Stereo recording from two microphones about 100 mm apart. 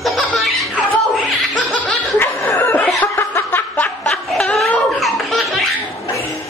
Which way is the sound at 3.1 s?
20° left (ahead or behind).